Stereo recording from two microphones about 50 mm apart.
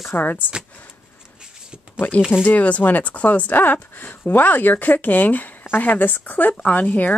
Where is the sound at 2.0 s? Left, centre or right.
Left.